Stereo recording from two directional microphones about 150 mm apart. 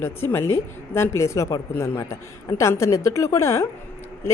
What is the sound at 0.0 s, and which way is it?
Speech, 15° left (ahead or behind).